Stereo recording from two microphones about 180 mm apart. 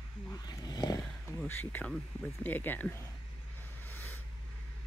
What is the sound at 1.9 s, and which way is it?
Speech, 10° left (ahead or behind).